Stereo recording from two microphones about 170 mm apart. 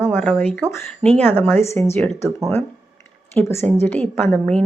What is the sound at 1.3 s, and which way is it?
Speech, 10° left (ahead or behind).